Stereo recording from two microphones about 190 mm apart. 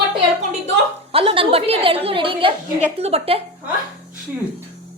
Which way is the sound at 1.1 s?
30° right (ahead or behind).